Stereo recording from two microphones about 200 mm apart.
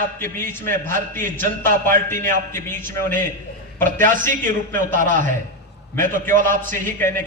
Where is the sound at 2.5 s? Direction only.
10° left (ahead or behind).